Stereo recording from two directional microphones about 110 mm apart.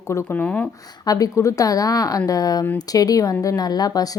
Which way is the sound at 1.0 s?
30° left (ahead or behind).